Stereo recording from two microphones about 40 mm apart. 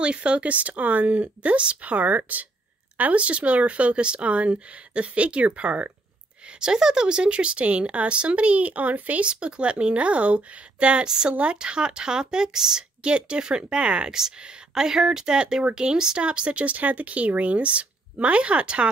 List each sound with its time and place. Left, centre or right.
0.0 s speech: right
6.6 s speech: centre; by 9.2 s right
9.2 s speech: right
11.1 s speech: centre